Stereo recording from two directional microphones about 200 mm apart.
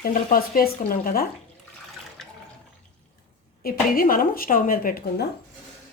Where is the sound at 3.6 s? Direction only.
45° left (ahead or behind).